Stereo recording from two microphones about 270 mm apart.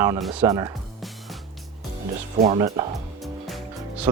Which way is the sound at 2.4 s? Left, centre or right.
Centre.